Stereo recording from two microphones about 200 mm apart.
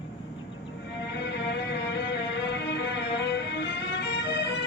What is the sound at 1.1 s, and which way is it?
Music, 60° left (ahead or behind).